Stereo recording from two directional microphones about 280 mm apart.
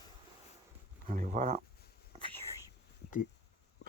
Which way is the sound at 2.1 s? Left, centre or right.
Right.